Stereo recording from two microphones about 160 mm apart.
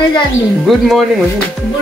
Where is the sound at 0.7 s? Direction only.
Centre (ahead or behind).